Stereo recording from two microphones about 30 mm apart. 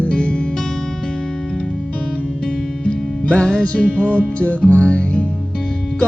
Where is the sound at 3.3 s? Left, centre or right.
Left.